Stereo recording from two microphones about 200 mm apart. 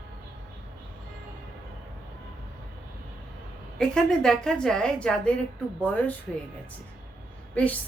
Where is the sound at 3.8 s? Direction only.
5° left (ahead or behind).